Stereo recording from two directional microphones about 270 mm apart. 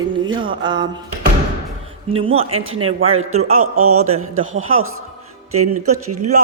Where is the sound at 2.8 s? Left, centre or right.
Right.